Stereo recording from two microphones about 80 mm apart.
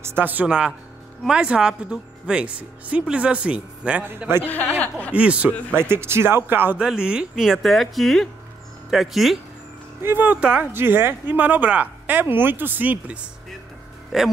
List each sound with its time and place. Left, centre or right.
0.0 s speech: right
0.5 s speech: centre
4.5 s speech: left
5.1 s speech: centre
5.8 s speech: right
6.8 s speech: centre
10.0 s speech: right
10.7 s speech: right
14.1 s speech: centre